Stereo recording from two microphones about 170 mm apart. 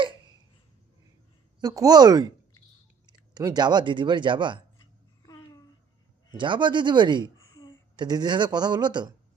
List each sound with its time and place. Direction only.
1.6 s speech: 20° right (ahead or behind)
6.3 s speech: 30° right (ahead or behind)